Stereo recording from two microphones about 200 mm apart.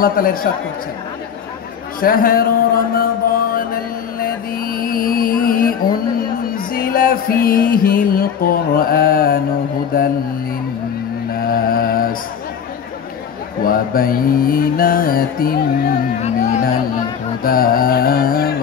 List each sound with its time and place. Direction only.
0.0 s mantra: 45° left (ahead or behind)
2.0 s a man's voice: 45° left (ahead or behind)
4.2 s music: 45° left (ahead or behind)
11.3 s mantra: 45° left (ahead or behind)
13.7 s mantra: 45° left (ahead or behind)